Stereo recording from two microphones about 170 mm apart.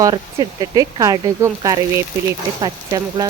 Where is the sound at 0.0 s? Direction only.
25° right (ahead or behind).